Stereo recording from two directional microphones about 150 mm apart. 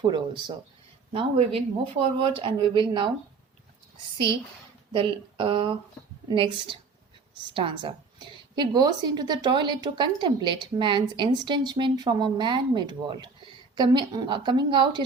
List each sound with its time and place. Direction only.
0.0 s a woman's voice: 30° right (ahead or behind)
4.9 s a woman's voice: 35° right (ahead or behind)